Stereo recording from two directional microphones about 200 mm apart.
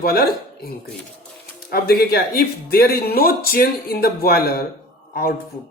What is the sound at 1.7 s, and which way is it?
Speech, 50° left (ahead or behind).